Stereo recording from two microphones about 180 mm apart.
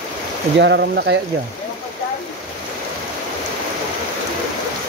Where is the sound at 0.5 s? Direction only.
65° right (ahead or behind).